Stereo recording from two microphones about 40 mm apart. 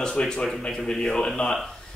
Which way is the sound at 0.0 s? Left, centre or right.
Left.